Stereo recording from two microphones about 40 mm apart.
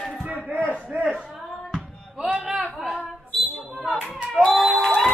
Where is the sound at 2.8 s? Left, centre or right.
Centre.